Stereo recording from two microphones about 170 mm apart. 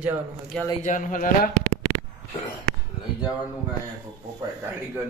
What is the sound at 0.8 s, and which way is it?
Speech, 50° left (ahead or behind).